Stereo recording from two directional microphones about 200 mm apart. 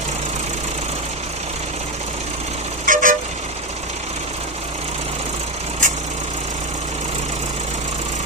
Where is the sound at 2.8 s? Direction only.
40° right (ahead or behind).